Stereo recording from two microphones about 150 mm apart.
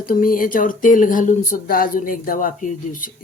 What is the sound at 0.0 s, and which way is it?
Speech, 70° left (ahead or behind).